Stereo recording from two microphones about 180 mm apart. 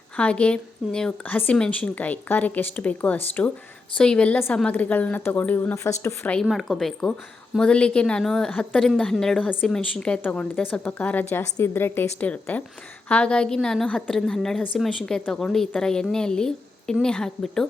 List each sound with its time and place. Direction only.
0.2 s a woman's voice: 5° left (ahead or behind)